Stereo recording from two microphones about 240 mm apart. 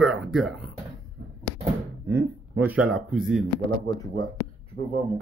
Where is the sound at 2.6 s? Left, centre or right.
Centre.